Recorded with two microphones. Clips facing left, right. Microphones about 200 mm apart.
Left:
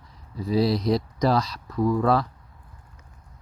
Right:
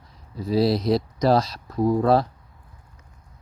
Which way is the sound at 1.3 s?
30° right (ahead or behind).